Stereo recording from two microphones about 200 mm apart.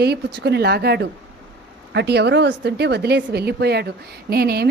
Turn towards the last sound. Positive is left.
turn(degrees=-50)  # may be behind; listen again after turning